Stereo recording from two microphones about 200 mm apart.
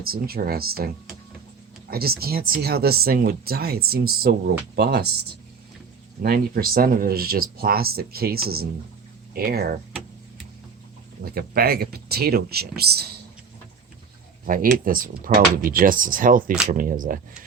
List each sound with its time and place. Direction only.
0.0 s speech: 50° right (ahead or behind)
1.9 s speech: 50° right (ahead or behind)
6.2 s speech: 45° right (ahead or behind)
11.2 s speech: 50° right (ahead or behind)
14.4 s speech: 45° right (ahead or behind)